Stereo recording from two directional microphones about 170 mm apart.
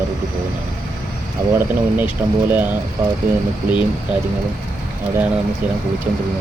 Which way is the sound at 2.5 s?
10° right (ahead or behind).